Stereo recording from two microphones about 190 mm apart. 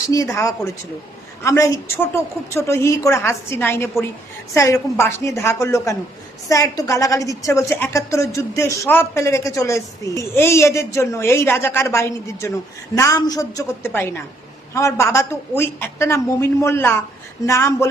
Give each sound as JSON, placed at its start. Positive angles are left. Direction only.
{"t": 0.1, "sound": "a woman's voice", "side_deg": 15}